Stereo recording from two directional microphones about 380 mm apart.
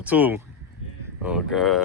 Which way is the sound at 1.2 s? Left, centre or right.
Centre.